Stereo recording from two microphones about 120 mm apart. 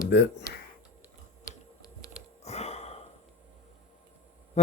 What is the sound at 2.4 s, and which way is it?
Gasp, 60° left (ahead or behind).